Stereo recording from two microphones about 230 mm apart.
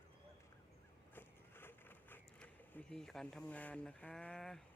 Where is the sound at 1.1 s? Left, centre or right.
Centre.